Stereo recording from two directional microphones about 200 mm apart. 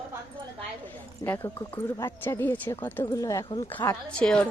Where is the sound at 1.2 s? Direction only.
10° left (ahead or behind).